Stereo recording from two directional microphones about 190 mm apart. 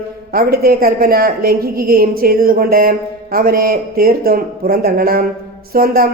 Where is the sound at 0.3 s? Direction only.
50° right (ahead or behind).